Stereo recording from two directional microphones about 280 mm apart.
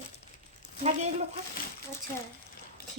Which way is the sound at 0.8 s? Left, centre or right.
Right.